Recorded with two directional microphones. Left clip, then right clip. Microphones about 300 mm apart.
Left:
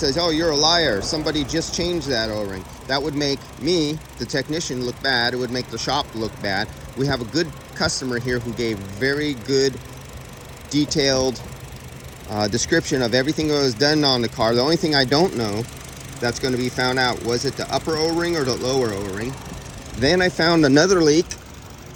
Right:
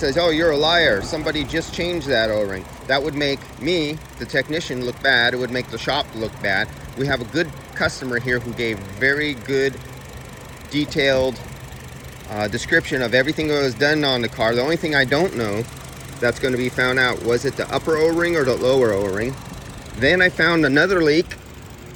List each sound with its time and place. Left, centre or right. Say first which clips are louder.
0.0 s speech: right 3 dB; centre
10.9 s speech: right 3 dB; centre
20.0 s speech: right 2 dB; centre